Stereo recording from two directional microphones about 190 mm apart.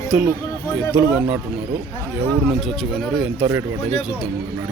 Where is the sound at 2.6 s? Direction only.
Centre (ahead or behind).